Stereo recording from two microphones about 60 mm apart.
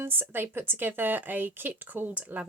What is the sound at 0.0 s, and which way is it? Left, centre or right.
Speech, right.